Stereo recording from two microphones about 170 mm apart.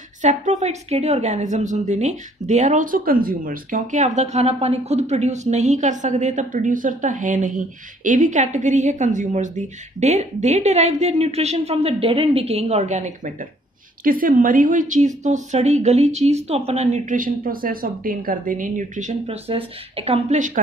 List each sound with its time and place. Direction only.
0.2 s a woman's voice: 45° right (ahead or behind)